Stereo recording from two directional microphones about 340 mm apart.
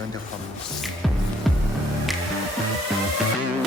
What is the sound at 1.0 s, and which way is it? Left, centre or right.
Music, centre.